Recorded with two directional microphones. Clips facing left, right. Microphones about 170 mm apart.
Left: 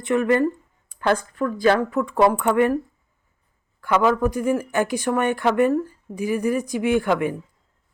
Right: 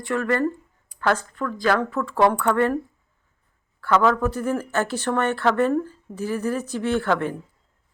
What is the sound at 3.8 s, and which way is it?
Speech, 15° left (ahead or behind).